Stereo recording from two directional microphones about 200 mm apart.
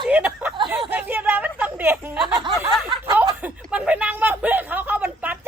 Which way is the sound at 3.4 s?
5° right (ahead or behind).